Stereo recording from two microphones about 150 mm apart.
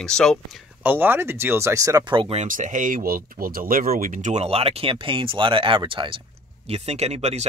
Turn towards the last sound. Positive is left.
turn(degrees=-45)  # may be behind; listen again after turning